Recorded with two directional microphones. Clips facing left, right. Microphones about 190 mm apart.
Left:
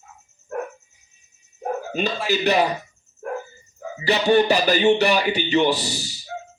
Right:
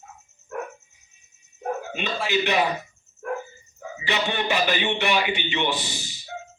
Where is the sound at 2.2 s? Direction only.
40° left (ahead or behind).